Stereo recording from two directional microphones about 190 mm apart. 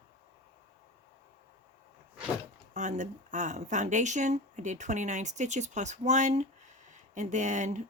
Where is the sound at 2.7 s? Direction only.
40° right (ahead or behind).